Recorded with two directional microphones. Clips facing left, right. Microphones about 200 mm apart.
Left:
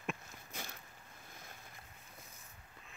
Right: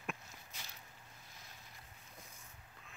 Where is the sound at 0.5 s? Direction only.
50° left (ahead or behind).